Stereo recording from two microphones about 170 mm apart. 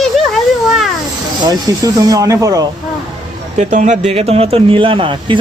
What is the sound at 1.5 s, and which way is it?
Speech, 20° right (ahead or behind).